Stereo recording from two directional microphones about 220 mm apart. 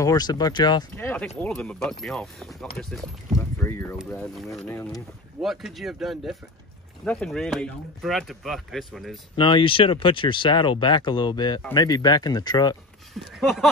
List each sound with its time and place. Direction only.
0.0 s speech: 15° left (ahead or behind)
0.9 s speech: 5° left (ahead or behind)
3.3 s boat: 10° left (ahead or behind)
4.1 s speech: centre (ahead or behind)
5.4 s speech: centre (ahead or behind)
9.4 s speech: 20° left (ahead or behind)
13.1 s speech: centre (ahead or behind)